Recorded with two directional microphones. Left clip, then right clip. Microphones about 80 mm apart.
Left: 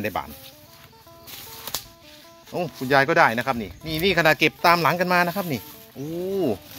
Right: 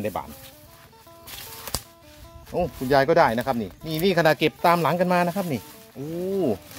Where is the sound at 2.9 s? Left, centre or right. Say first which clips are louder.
Left 1 dB; right.